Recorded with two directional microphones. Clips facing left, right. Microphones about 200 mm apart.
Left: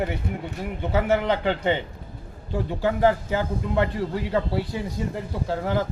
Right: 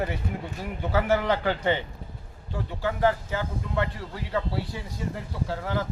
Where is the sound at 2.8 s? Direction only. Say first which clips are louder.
Left 3 dB; 15° left (ahead or behind).